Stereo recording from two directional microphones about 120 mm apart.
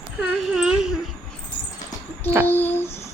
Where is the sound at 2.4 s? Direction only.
15° left (ahead or behind).